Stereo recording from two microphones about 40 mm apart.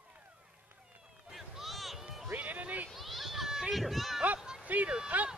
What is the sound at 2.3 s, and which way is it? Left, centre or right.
Run, right.